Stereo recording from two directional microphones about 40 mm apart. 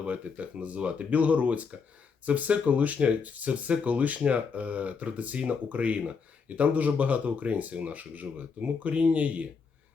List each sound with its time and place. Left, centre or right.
0.0 s speech: right